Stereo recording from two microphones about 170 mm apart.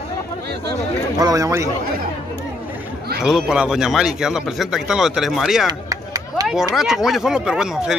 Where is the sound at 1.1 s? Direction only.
20° right (ahead or behind).